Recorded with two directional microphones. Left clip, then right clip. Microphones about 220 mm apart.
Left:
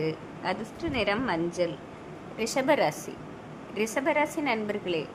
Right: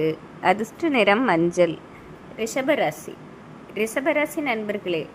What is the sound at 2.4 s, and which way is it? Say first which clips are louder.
A woman's voice: right 3 dB; 10° right (ahead or behind).